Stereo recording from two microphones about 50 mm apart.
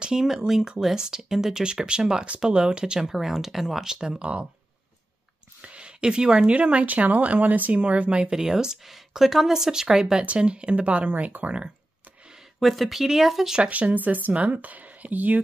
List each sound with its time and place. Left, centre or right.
0.0 s a woman's voice: centre
3.9 s a woman's voice: centre
4.2 s speech: right
5.6 s a woman's voice: right
12.5 s speech: centre
13.6 s speech: right